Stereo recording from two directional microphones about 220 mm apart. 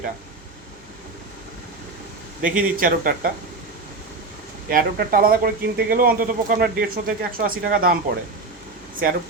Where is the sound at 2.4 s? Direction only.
40° right (ahead or behind).